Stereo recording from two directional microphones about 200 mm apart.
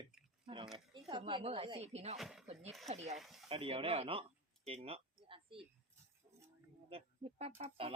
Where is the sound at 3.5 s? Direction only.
25° right (ahead or behind).